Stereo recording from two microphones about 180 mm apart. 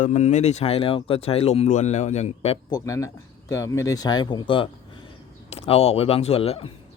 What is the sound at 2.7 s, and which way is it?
Speech, 20° left (ahead or behind).